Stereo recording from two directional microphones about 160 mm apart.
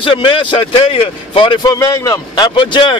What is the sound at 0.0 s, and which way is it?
Speech, 30° left (ahead or behind).